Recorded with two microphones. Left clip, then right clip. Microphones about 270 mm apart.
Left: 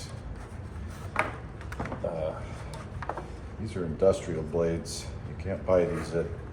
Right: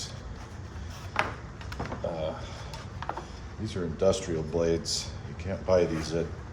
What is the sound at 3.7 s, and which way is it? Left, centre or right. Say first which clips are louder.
Speech: left 1 dB; right.